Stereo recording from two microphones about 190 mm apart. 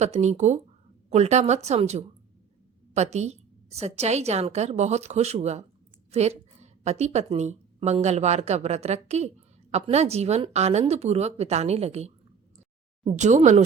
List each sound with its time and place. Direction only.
0.0 s a woman's voice: 35° right (ahead or behind)
13.1 s a woman's voice: 40° right (ahead or behind)